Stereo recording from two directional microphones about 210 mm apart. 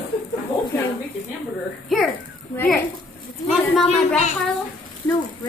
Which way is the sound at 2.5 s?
10° left (ahead or behind).